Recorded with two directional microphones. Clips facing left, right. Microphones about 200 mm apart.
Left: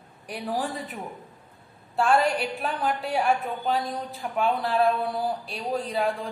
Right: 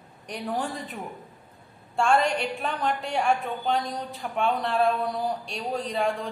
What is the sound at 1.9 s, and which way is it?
A woman's voice, 5° left (ahead or behind).